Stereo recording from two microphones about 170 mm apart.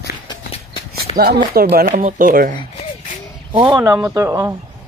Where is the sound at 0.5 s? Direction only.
35° left (ahead or behind).